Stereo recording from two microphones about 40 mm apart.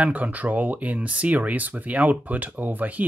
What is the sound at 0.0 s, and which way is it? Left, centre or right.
Speech, right.